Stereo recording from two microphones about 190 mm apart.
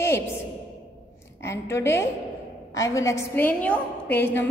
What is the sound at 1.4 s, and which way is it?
A woman's voice, 15° left (ahead or behind).